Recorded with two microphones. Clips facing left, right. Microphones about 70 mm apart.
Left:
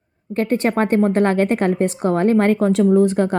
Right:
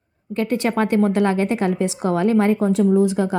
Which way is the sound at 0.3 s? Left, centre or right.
Left.